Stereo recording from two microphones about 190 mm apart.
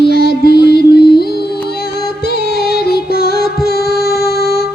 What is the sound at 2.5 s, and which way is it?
Music, 55° left (ahead or behind).